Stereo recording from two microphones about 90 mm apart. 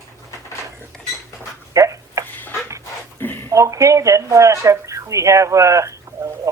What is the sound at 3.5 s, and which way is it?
Speech, 35° right (ahead or behind).